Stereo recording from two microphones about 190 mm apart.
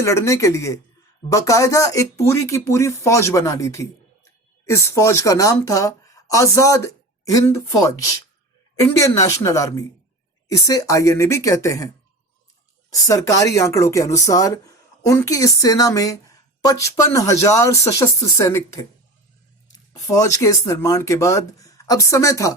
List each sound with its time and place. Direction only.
0.0 s speech: 15° left (ahead or behind)
12.9 s speech: 15° left (ahead or behind)